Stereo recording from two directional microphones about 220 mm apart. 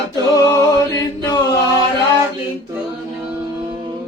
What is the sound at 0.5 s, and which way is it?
Mantra, 15° left (ahead or behind).